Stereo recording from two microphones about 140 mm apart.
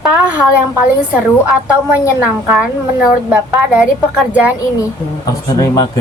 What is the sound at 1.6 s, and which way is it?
A woman's voice, 15° right (ahead or behind).